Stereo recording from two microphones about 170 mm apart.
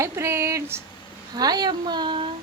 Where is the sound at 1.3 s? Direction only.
25° right (ahead or behind).